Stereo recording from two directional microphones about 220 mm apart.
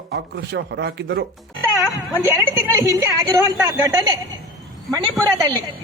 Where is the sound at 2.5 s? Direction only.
10° right (ahead or behind).